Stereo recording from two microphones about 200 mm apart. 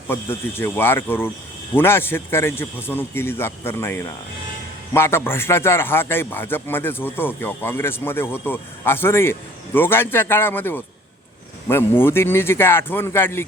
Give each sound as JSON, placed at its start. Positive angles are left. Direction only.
{"t": 0.1, "sound": "a man's voice", "side_deg": 10}